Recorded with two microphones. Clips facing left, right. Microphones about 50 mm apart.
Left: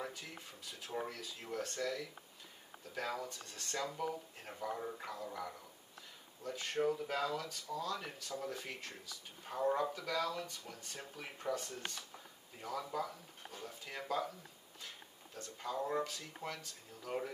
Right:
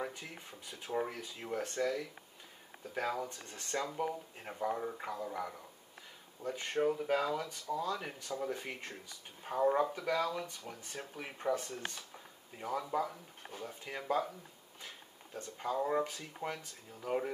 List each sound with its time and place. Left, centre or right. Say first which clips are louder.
0.3 s speech: right 2 dB; right
15.3 s speech: right 5 dB; right